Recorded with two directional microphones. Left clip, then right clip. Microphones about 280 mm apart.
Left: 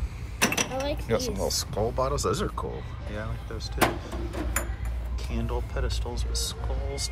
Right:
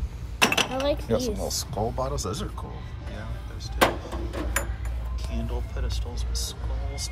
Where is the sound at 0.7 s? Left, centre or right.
Right.